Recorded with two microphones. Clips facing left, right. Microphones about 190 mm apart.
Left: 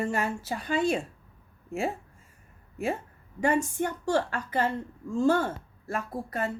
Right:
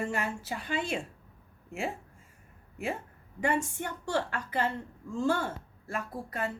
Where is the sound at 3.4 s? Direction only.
40° left (ahead or behind).